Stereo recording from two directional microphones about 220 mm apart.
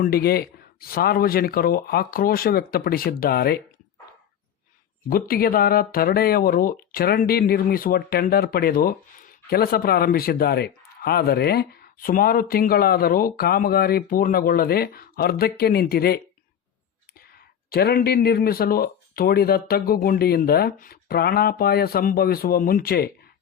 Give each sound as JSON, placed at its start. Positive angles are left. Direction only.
{"t": 0.0, "sound": "speech", "side_deg": 45}
{"t": 5.0, "sound": "speech", "side_deg": 40}
{"t": 17.7, "sound": "speech", "side_deg": 45}